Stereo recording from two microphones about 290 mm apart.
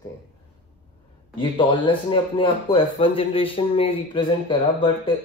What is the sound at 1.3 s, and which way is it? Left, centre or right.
Speech, centre.